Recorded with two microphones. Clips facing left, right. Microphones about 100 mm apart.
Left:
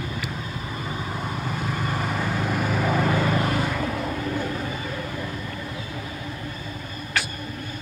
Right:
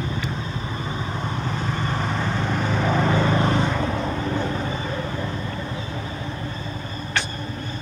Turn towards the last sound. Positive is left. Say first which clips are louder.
# right 1 dB
turn(degrees=5)  # may be behind; listen again after turning